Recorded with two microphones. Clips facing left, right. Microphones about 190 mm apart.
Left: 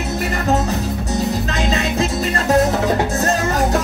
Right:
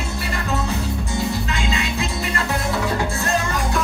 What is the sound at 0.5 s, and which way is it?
Music, 40° left (ahead or behind).